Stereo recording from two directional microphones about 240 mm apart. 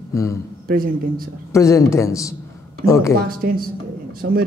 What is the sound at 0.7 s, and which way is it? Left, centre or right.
Speech, right.